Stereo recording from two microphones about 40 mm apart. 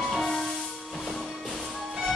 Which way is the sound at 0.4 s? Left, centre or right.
Centre.